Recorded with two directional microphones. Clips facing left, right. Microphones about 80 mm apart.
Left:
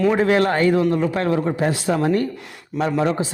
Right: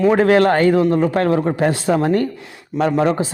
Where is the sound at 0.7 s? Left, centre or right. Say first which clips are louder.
Right 3 dB; right.